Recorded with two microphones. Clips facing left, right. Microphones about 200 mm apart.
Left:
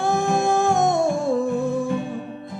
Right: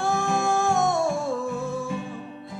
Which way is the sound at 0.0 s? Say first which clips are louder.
Left 4 dB; 15° left (ahead or behind).